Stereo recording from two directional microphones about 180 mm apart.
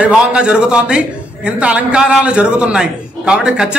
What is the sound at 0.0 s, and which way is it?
A man's voice, 5° right (ahead or behind).